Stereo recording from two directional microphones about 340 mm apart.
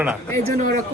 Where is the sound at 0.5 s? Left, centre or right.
Right.